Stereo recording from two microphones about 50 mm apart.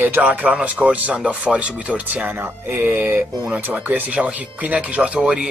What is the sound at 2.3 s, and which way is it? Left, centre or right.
Music, right.